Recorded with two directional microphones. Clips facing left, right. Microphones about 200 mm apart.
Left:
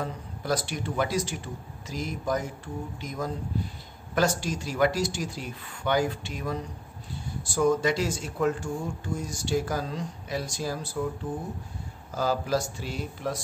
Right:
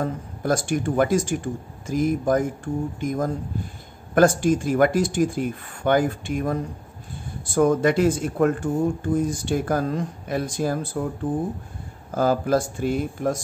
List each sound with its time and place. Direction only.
0.0 s speech: 50° right (ahead or behind)
12.1 s speech: 55° right (ahead or behind)